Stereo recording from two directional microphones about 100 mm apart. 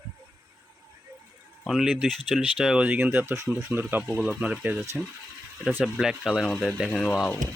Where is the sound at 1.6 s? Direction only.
Centre (ahead or behind).